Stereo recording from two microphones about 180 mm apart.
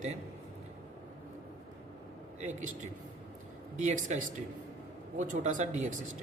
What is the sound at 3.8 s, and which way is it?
Speech, 40° right (ahead or behind).